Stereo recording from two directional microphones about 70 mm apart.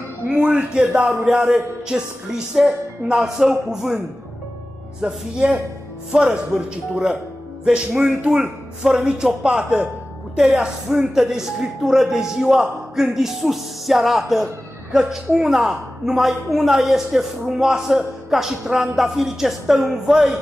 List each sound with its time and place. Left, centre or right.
0.3 s a man's voice: centre
1.0 s speech: centre
5.0 s speech: centre